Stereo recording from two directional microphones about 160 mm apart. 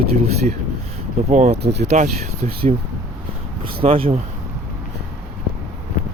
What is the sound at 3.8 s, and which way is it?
Speech, 35° right (ahead or behind).